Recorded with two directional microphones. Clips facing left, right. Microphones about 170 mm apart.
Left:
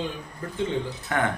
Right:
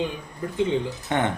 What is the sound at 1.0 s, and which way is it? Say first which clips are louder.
Speech: right 1 dB; 25° right (ahead or behind).